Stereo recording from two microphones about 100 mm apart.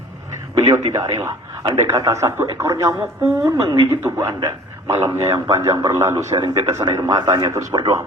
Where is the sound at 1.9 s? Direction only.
30° right (ahead or behind).